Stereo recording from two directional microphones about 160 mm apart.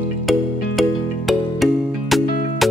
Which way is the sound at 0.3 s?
Centre (ahead or behind).